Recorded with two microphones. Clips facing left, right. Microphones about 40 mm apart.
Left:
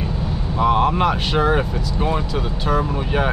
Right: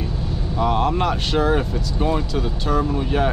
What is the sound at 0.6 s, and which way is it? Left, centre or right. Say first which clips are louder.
Speech: left 3 dB; centre.